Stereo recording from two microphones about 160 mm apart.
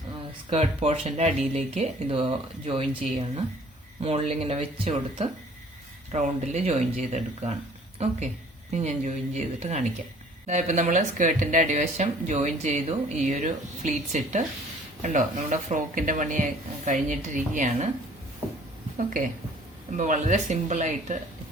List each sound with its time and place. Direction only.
0.5 s speech: 40° right (ahead or behind)
6.1 s speech: 45° right (ahead or behind)
8.7 s speech: 45° right (ahead or behind)
18.9 s a woman's voice: 55° right (ahead or behind)